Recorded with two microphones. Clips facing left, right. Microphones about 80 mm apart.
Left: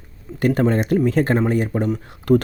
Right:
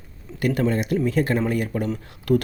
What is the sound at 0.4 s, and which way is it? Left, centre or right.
Speech, left.